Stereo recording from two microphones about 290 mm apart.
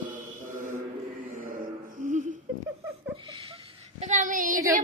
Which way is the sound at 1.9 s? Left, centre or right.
Right.